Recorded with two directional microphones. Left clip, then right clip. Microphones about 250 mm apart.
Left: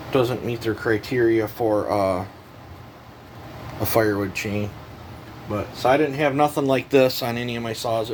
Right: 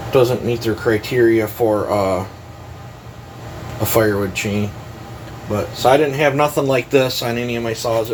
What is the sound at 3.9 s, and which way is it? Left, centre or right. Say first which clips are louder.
Speech: right 4 dB; left.